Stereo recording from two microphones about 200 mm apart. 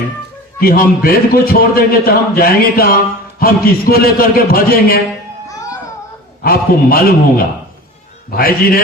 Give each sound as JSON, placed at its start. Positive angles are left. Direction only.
{"t": 0.6, "sound": "a man's voice", "side_deg": 45}
{"t": 5.5, "sound": "music", "side_deg": 15}
{"t": 6.4, "sound": "a man's voice", "side_deg": 50}